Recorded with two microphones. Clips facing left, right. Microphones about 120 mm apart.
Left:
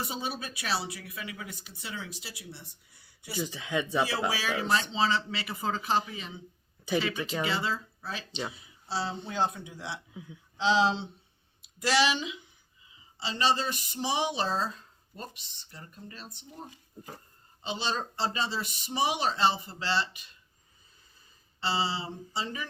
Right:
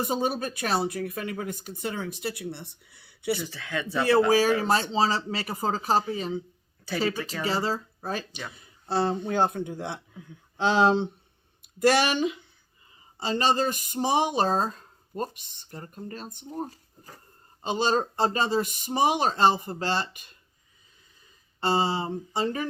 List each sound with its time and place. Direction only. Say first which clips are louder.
0.0 s speech: right 8 dB; 50° right (ahead or behind); by 3.3 s 70° right (ahead or behind)
3.3 s speech: left 1 dB; 15° left (ahead or behind)
4.3 s speech: right 8 dB; 45° right (ahead or behind)
6.9 s speech: left 2 dB; 15° left (ahead or behind)
7.4 s speech: right 7 dB; 40° right (ahead or behind)
8.3 s speech: left 3 dB; 20° left (ahead or behind)
8.5 s speech: right 7 dB; 55° right (ahead or behind)
12.8 s a sound: right 6 dB; 50° right (ahead or behind)
17.6 s speech: right 8 dB; 45° right (ahead or behind)
21.6 s speech: right 6 dB; 50° right (ahead or behind)